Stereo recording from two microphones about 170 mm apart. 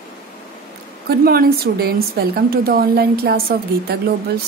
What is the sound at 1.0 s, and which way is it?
A woman's voice, 65° right (ahead or behind).